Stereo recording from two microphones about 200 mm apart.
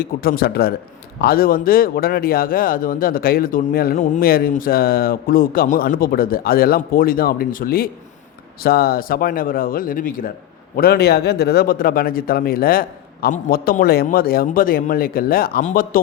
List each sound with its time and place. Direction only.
0.0 s speech: 50° left (ahead or behind)